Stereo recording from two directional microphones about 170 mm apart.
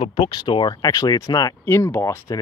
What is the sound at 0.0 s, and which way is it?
Speech, 30° left (ahead or behind).